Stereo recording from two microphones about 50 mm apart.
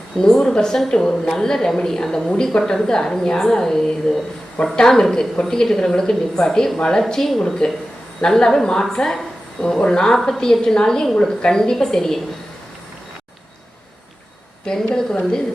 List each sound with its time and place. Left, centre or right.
0.2 s a woman's voice: centre
14.9 s a woman's voice: centre